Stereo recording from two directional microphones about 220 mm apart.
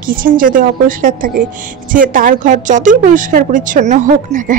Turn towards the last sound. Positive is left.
turn(degrees=-35)  # may be behind; listen again after turning